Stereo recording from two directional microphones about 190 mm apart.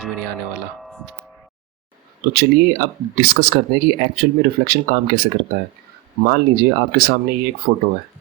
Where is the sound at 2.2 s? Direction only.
55° right (ahead or behind).